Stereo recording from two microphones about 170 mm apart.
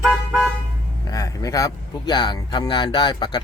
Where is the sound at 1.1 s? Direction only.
20° left (ahead or behind).